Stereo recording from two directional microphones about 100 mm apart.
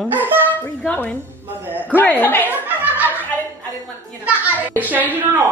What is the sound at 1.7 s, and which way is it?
Speech, 20° right (ahead or behind).